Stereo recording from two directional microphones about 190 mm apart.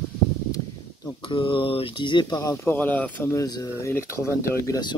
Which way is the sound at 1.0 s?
25° left (ahead or behind).